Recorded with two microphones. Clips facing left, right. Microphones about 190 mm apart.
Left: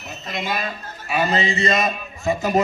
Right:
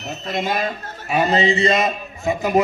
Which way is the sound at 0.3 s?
45° right (ahead or behind).